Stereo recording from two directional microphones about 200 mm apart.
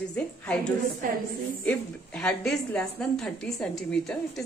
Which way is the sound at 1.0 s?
45° right (ahead or behind).